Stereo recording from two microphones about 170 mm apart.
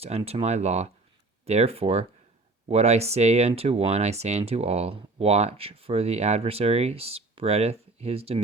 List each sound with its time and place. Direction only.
0.0 s speech: 35° right (ahead or behind)